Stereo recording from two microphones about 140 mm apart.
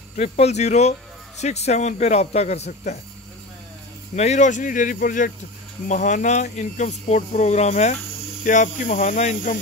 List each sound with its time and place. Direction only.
0.1 s speech: 50° left (ahead or behind)
4.1 s speech: 55° left (ahead or behind); by 5.3 s 80° left
5.9 s speech: 60° left (ahead or behind)
8.5 s speech: 65° left (ahead or behind)